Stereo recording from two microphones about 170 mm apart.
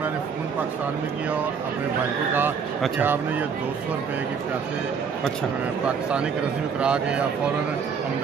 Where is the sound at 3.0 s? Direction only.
10° right (ahead or behind).